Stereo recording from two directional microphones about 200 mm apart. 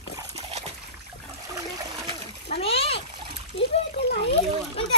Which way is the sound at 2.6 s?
30° left (ahead or behind).